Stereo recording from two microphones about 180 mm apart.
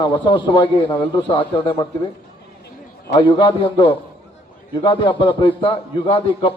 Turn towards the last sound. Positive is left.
turn(degrees=30)  # may be behind; listen again after turning